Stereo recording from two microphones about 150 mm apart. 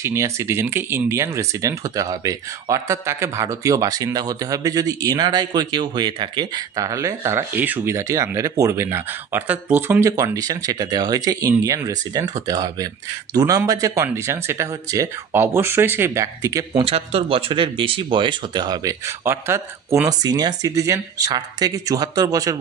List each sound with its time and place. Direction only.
0.0 s speech: 20° right (ahead or behind)
16.8 s speech: 40° right (ahead or behind); by 22.6 s 25° right (ahead or behind)